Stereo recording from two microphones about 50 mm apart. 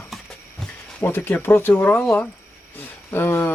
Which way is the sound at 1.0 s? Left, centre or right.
Left.